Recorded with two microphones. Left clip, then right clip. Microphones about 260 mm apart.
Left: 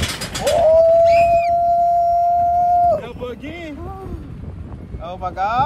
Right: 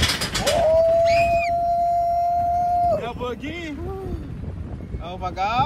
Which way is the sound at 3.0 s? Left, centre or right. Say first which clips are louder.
Right 1 dB; right.